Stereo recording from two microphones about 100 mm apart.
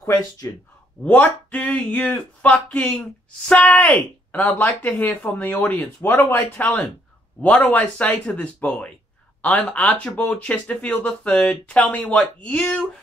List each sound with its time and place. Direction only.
0.1 s speech: 40° left (ahead or behind)
1.0 s speech: 15° left (ahead or behind)
6.2 s speech: 25° left (ahead or behind)
6.6 s speech: 15° left (ahead or behind)